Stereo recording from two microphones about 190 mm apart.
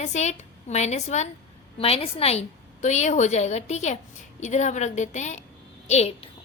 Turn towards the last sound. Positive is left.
turn(degrees=35)  # may be behind; listen again after turning